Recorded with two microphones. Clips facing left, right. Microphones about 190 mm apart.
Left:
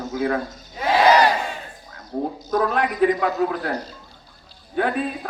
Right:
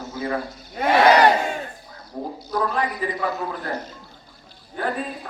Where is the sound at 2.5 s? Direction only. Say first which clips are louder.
Left 2 dB; 70° left (ahead or behind).